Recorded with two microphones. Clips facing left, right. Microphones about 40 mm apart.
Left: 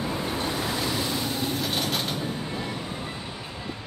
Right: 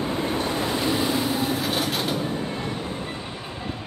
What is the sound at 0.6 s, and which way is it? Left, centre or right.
Vehicle, centre.